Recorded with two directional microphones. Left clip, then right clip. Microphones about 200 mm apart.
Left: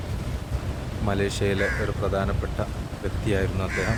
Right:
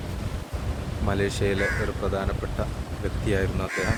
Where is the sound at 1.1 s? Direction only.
5° left (ahead or behind).